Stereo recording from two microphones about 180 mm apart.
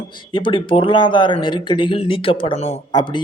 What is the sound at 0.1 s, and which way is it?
Speech, 25° left (ahead or behind).